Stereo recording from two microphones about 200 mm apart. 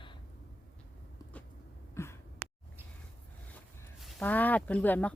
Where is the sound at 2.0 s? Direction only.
15° left (ahead or behind).